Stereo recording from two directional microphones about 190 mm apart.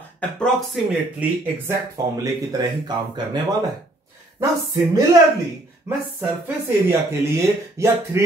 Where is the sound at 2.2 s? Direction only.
20° right (ahead or behind).